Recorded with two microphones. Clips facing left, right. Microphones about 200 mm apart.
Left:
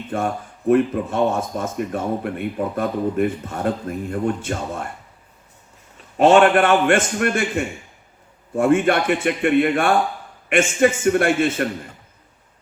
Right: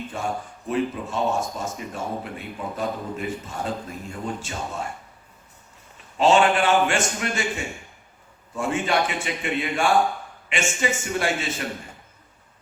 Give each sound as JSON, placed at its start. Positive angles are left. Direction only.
{"t": 0.1, "sound": "speech", "side_deg": 60}
{"t": 6.1, "sound": "speech", "side_deg": 55}